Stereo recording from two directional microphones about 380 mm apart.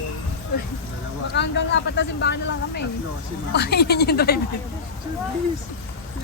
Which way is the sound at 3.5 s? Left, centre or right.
Left.